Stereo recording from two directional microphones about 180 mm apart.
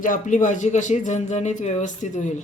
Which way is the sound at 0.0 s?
45° left (ahead or behind).